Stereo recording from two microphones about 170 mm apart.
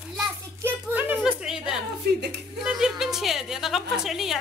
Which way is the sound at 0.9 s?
10° right (ahead or behind).